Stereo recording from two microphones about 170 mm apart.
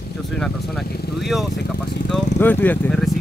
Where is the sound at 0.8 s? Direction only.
65° left (ahead or behind).